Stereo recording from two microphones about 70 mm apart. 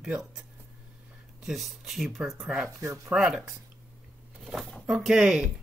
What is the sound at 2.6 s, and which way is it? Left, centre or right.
Speech, right.